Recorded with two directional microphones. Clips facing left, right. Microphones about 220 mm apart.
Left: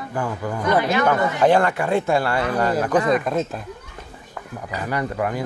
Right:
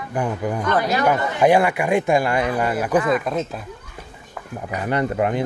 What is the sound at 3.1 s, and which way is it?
Speech, centre (ahead or behind).